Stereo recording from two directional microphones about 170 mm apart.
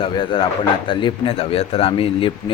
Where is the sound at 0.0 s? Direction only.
30° left (ahead or behind).